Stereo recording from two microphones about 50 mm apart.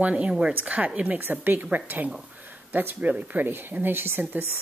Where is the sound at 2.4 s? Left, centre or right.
Right.